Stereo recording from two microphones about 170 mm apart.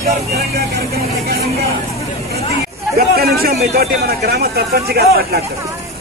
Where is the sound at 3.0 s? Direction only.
65° right (ahead or behind).